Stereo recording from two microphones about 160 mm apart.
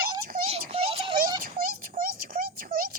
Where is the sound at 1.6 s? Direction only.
65° right (ahead or behind).